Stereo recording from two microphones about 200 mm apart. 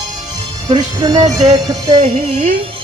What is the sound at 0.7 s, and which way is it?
Speech, 20° right (ahead or behind).